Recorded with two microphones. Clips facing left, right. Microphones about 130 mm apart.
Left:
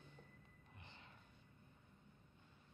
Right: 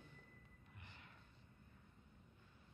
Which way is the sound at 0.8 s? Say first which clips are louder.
Left 1 dB; 25° left (ahead or behind).